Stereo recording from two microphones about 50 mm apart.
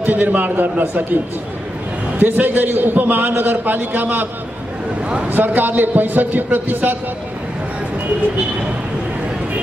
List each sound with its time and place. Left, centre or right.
0.0 s a man's voice: right
5.3 s a man's voice: right